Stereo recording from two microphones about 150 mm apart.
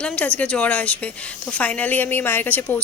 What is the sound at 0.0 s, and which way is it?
A woman's voice, 10° left (ahead or behind).